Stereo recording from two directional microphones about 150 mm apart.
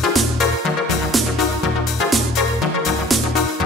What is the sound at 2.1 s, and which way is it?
Music, centre (ahead or behind).